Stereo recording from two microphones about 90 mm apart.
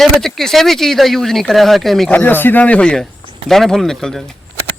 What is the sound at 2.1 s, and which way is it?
Speech, 20° left (ahead or behind).